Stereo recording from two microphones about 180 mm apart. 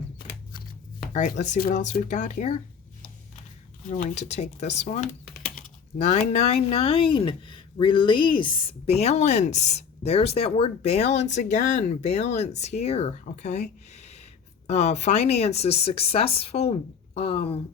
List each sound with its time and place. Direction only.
0.9 s speech: 45° left (ahead or behind)
3.8 s speech: 40° left (ahead or behind)
6.0 s speech: 40° left (ahead or behind)